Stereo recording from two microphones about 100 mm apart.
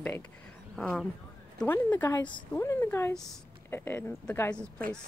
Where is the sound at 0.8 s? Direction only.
5° left (ahead or behind).